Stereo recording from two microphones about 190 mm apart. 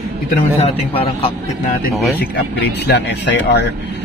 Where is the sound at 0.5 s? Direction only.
30° left (ahead or behind).